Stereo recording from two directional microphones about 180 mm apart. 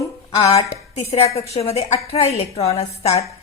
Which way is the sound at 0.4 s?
35° left (ahead or behind).